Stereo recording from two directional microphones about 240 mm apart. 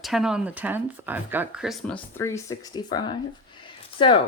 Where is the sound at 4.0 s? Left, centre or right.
Left.